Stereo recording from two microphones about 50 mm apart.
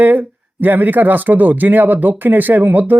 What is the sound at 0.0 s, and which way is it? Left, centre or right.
Speech, right.